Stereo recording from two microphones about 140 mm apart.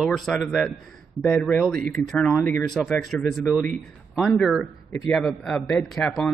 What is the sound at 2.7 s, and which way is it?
A man's voice, centre (ahead or behind).